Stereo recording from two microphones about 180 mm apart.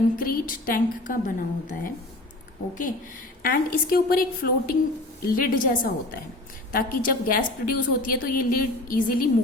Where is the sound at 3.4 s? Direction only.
50° left (ahead or behind).